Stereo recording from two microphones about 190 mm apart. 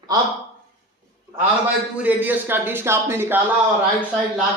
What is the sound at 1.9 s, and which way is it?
A man's voice, 10° right (ahead or behind).